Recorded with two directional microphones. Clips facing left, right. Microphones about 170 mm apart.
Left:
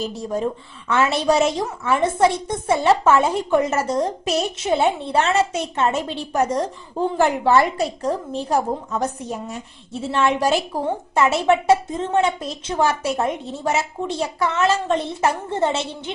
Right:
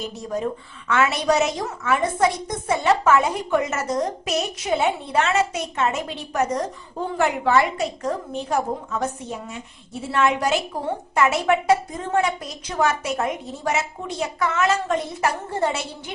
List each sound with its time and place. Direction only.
0.0 s a woman's voice: 30° left (ahead or behind)